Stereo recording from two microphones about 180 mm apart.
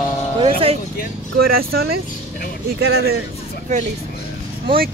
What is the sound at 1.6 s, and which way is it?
Speech, 60° right (ahead or behind).